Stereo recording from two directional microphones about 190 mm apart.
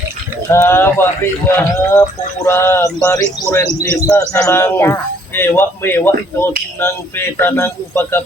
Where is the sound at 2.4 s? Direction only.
10° left (ahead or behind).